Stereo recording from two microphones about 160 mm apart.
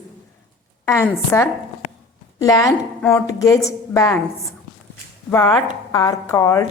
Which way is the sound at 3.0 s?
5° left (ahead or behind).